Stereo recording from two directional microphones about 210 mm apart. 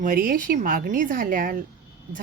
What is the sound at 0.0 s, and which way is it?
A woman's voice, 40° right (ahead or behind).